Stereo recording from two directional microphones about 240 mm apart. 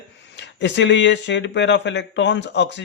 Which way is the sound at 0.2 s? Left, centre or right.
Left.